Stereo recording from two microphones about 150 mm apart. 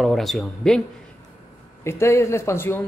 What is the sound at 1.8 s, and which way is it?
Speech, 15° left (ahead or behind).